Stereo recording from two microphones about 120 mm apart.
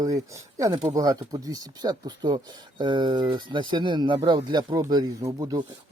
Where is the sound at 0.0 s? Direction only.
30° right (ahead or behind).